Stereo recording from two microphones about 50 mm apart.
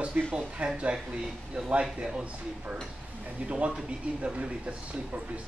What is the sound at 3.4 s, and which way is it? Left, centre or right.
Speech, right.